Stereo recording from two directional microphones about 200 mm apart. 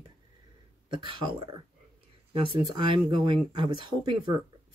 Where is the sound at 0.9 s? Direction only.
25° right (ahead or behind).